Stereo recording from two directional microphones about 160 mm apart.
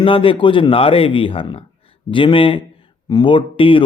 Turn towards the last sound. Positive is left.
turn(degrees=30)  # may be behind; listen again after turning